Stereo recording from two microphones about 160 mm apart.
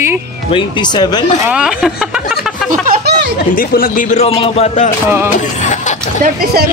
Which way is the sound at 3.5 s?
60° left (ahead or behind).